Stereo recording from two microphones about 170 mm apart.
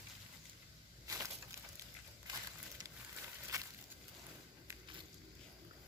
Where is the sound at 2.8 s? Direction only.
25° right (ahead or behind).